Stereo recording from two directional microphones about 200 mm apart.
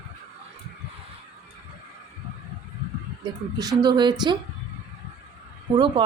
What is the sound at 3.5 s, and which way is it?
Speech, 20° right (ahead or behind).